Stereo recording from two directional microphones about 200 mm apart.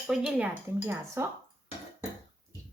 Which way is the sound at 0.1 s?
5° right (ahead or behind).